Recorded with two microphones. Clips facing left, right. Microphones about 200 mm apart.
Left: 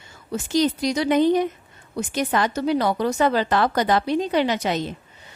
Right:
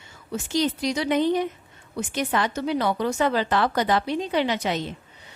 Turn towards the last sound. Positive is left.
turn(degrees=40)  # may be behind; listen again after turning